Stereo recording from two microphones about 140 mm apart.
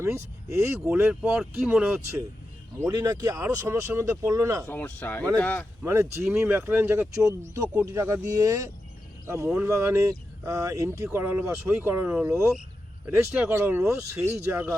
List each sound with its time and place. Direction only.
0.0 s speech: 20° right (ahead or behind)
4.7 s speech: 15° left (ahead or behind)
5.8 s speech: 20° right (ahead or behind)